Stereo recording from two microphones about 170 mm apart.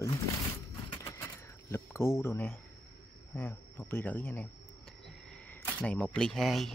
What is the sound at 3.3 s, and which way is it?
A man's voice, 10° left (ahead or behind).